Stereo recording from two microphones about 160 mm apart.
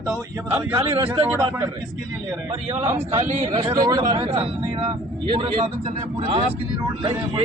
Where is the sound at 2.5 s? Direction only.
40° right (ahead or behind).